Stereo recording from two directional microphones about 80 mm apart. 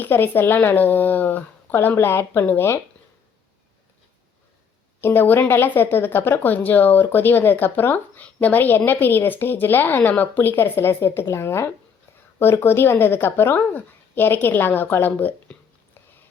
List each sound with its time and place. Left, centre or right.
0.0 s a woman's voice: left
4.9 s a woman's voice: left